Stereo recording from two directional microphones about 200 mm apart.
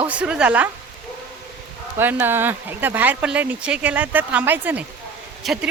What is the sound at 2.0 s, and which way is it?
A woman's voice, 10° right (ahead or behind).